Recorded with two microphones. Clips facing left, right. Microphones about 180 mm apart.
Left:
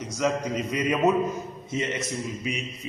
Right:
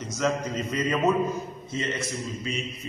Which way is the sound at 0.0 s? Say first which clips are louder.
Left 1 dB; 15° left (ahead or behind).